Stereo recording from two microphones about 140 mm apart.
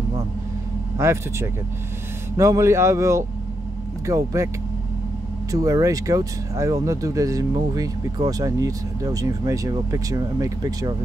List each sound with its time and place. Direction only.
0.9 s speech: 20° right (ahead or behind)
5.5 s speech: 25° right (ahead or behind)